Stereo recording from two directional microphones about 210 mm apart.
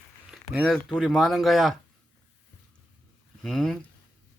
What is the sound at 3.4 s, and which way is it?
Speech, centre (ahead or behind).